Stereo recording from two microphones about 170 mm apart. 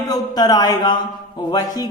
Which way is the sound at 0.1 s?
20° left (ahead or behind).